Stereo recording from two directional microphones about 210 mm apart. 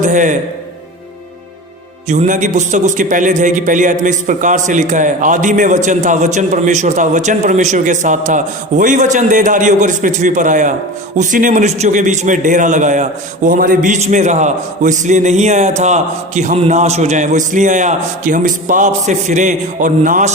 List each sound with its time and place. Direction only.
0.0 s a man's voice: 35° right (ahead or behind)
2.0 s a man's voice: 35° right (ahead or behind)